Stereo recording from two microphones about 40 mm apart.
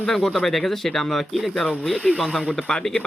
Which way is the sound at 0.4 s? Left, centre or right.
Centre.